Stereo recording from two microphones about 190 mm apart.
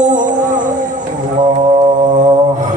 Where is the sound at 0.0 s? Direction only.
40° right (ahead or behind).